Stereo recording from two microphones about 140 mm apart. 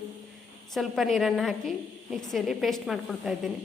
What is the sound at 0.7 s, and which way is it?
A woman's voice, centre (ahead or behind).